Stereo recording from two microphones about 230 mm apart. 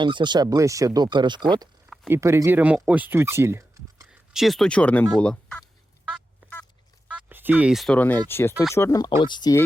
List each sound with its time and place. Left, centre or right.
0.0 s speech: centre
5.2 s fowl: centre
7.1 s speech: centre